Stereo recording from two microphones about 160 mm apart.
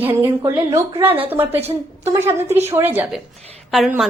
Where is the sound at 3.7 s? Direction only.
Centre (ahead or behind).